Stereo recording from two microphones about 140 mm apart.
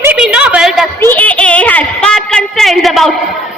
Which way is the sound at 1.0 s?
10° left (ahead or behind).